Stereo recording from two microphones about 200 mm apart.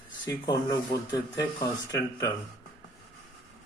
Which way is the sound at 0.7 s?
20° left (ahead or behind).